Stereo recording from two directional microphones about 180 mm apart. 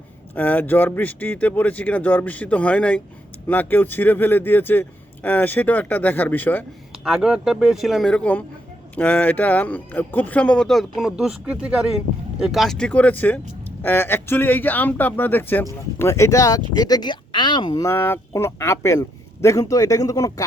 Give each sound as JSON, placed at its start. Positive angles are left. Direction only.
{"t": 0.3, "sound": "speech", "side_deg": 10}
{"t": 6.9, "sound": "speech", "side_deg": 0}